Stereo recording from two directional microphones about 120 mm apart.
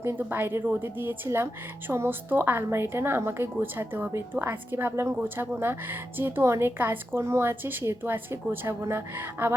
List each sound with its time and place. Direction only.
0.0 s a woman's voice: 20° right (ahead or behind)